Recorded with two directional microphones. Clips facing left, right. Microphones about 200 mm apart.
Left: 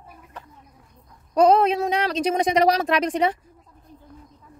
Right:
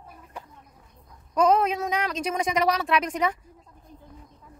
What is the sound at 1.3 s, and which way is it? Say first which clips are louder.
Speech: left 5 dB; 35° left (ahead or behind).